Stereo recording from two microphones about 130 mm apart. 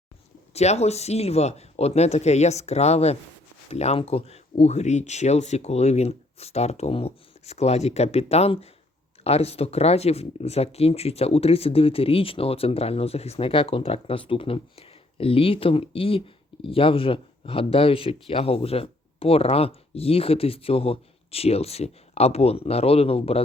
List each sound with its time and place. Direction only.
0.5 s speech: 55° left (ahead or behind)